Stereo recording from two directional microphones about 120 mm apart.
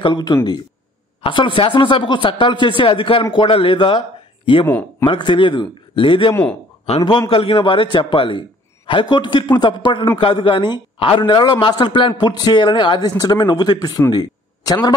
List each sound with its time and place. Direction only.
0.0 s a man's voice: 35° left (ahead or behind)
1.2 s a man's voice: 45° left (ahead or behind)
5.0 s a man's voice: 40° left (ahead or behind)
14.1 s a sound: 30° left (ahead or behind)